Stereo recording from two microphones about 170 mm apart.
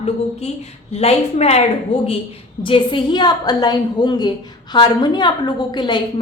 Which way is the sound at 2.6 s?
30° left (ahead or behind).